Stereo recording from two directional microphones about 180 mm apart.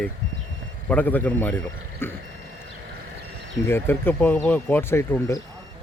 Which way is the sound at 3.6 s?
10° left (ahead or behind).